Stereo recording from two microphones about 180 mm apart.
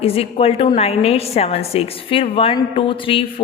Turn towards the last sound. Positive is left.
turn(degrees=30)  # may be behind; listen again after turning